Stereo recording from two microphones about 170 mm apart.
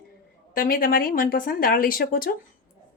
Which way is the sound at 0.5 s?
55° left (ahead or behind).